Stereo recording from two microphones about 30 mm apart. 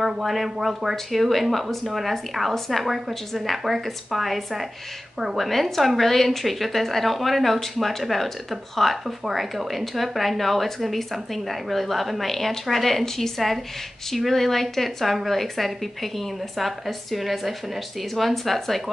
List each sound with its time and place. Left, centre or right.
0.2 s a woman's voice: centre
5.5 s a woman's voice: centre